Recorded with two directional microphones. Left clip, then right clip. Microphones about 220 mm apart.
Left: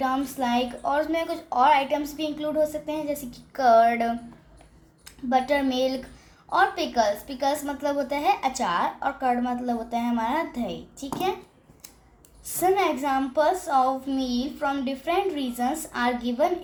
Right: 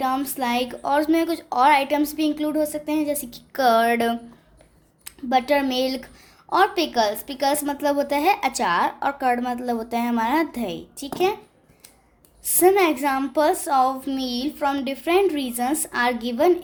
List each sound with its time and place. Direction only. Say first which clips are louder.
0.0 s a woman's voice: right 2 dB; 50° right (ahead or behind)
12.5 s a woman's voice: right 5 dB; 50° right (ahead or behind)